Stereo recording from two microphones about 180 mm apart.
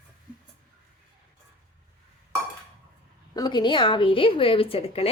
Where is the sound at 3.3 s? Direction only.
25° left (ahead or behind).